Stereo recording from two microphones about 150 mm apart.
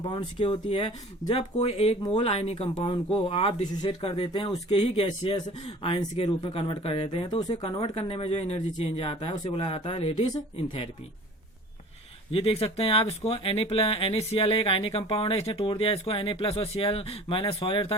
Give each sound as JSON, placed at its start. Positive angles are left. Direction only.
{"t": 0.0, "sound": "speech", "side_deg": 30}
{"t": 4.7, "sound": "speech", "side_deg": 40}
{"t": 7.5, "sound": "speech", "side_deg": 40}
{"t": 10.2, "sound": "speech", "side_deg": 25}
{"t": 12.3, "sound": "speech", "side_deg": 40}